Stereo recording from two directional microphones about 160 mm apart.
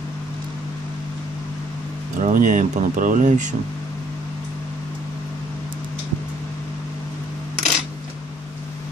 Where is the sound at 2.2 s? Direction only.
55° right (ahead or behind).